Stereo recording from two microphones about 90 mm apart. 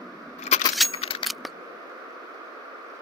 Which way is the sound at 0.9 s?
80° left.